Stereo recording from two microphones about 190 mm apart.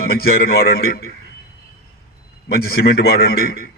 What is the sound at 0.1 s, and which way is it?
A man's voice, 55° left (ahead or behind).